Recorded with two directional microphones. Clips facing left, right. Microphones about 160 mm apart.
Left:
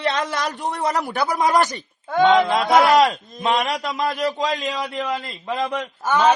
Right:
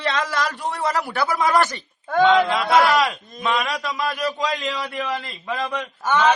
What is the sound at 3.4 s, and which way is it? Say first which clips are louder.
A man's voice: left 2 dB; 30° left (ahead or behind).